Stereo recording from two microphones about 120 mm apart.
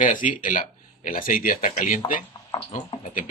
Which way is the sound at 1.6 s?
90° left.